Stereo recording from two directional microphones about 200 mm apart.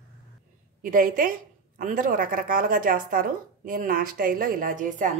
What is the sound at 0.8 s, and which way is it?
A woman's voice, 45° right (ahead or behind).